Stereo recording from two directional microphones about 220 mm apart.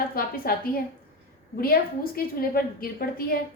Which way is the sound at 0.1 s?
40° left (ahead or behind).